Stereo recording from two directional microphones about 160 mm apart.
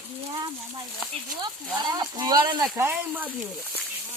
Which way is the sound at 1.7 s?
25° right (ahead or behind).